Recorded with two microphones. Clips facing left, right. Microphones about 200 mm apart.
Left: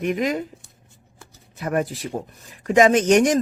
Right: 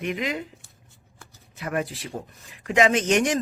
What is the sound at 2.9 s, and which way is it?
Speech, 50° left (ahead or behind).